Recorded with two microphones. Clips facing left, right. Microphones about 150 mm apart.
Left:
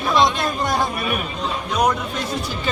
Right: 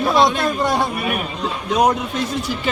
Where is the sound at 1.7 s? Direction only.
25° right (ahead or behind).